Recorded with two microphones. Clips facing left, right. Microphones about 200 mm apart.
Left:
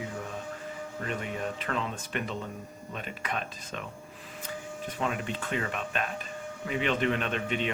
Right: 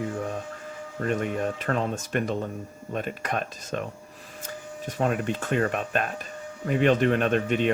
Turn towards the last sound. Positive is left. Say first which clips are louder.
# right 8 dB
turn(degrees=-45)  # may be behind; listen again after turning